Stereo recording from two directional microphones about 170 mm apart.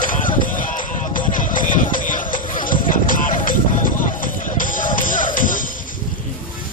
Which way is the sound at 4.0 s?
50° left (ahead or behind).